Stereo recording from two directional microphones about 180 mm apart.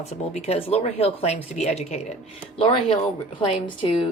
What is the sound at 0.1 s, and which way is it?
A woman's voice, 35° left (ahead or behind).